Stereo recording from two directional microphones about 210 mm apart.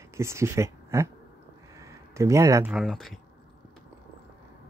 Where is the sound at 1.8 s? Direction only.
15° right (ahead or behind).